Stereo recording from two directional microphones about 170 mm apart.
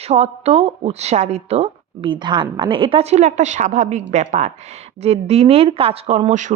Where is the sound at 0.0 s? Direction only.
40° right (ahead or behind).